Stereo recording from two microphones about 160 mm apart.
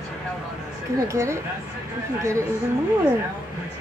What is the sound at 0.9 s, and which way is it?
Speech, 20° right (ahead or behind).